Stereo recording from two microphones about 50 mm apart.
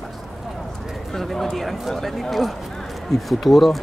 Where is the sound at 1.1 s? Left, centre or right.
Centre.